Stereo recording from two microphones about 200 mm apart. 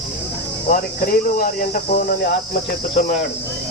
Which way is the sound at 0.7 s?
45° left (ahead or behind).